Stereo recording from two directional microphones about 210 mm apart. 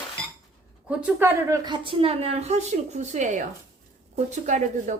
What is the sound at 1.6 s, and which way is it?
A woman's voice, 25° right (ahead or behind).